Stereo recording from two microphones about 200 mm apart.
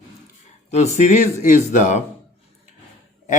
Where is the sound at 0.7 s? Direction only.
35° left (ahead or behind).